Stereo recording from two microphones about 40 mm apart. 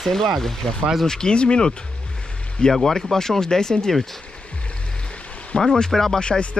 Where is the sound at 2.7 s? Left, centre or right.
Centre.